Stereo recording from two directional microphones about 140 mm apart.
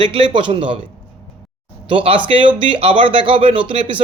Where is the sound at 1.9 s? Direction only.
40° right (ahead or behind).